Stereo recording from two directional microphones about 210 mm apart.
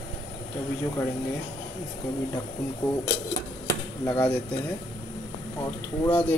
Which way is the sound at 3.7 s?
20° left (ahead or behind).